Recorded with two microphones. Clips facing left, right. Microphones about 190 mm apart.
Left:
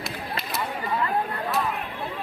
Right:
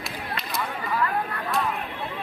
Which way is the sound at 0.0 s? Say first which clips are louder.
Left 1 dB; 5° left (ahead or behind).